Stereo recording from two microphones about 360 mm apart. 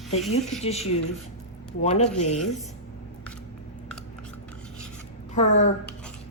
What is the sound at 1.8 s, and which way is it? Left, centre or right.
Speech, centre.